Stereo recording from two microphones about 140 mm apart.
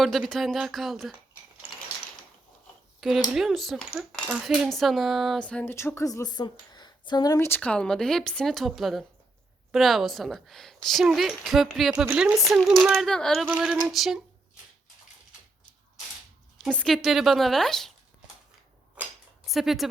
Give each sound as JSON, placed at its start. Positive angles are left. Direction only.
{"t": 0.0, "sound": "speech", "side_deg": 0}
{"t": 3.0, "sound": "speech", "side_deg": 0}
{"t": 5.7, "sound": "speech", "side_deg": 20}
{"t": 13.4, "sound": "speech", "side_deg": -5}
{"t": 16.6, "sound": "speech", "side_deg": 5}
{"t": 19.5, "sound": "speech", "side_deg": 0}